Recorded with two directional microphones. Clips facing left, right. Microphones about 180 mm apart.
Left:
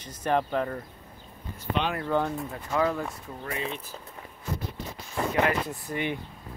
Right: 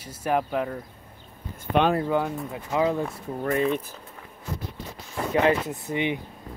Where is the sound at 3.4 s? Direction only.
50° right (ahead or behind).